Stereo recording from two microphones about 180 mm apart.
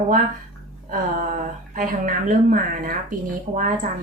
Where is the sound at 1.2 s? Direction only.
50° right (ahead or behind).